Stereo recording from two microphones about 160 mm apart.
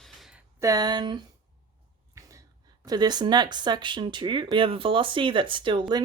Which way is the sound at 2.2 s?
20° right (ahead or behind).